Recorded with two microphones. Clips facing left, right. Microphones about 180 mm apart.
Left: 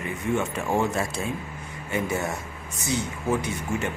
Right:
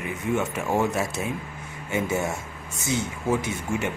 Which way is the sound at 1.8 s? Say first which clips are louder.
Right 1 dB; 25° right (ahead or behind).